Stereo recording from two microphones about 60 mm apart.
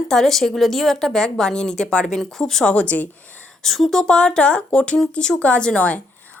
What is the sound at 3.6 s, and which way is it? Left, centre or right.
A woman's voice, centre.